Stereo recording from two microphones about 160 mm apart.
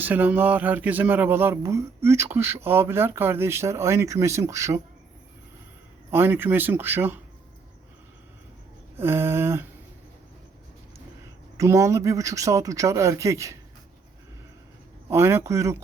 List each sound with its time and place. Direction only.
0.0 s speech: 10° right (ahead or behind)
6.1 s speech: 15° right (ahead or behind)
9.0 s speech: 15° right (ahead or behind)
11.5 s speech: 20° right (ahead or behind)
15.1 s speech: 15° right (ahead or behind)